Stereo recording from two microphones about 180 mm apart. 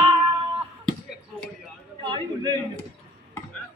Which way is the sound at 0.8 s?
5° left (ahead or behind).